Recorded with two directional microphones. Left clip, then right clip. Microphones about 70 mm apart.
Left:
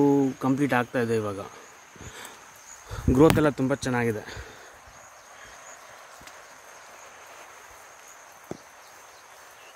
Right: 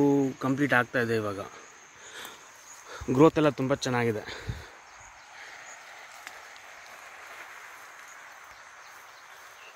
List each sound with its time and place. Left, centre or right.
0.0 s cricket: centre
0.6 s speech: centre
2.9 s speech: left
3.6 s speech: centre